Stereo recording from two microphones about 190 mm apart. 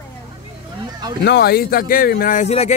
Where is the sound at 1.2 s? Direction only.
60° left (ahead or behind); by 2.7 s 35° left (ahead or behind).